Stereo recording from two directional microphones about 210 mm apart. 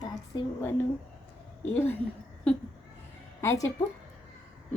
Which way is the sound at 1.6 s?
10° left (ahead or behind).